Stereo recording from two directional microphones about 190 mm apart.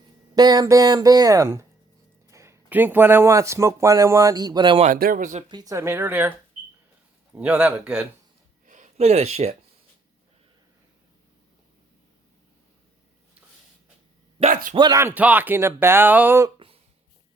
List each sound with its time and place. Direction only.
0.3 s speech: 20° right (ahead or behind)
4.9 s speech: 45° right (ahead or behind)
5.5 s speech: 20° right (ahead or behind)
7.3 s speech: 5° right (ahead or behind)
8.6 s a sound: 40° right (ahead or behind)
14.5 s speech: 45° right (ahead or behind)
14.8 s speech: 20° right (ahead or behind)
16.6 s a sound: 30° right (ahead or behind)